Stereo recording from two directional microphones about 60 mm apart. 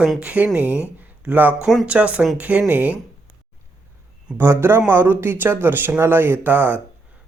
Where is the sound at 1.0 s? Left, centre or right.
Right.